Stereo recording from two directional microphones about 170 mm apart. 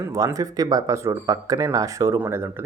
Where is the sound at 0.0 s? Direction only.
15° right (ahead or behind).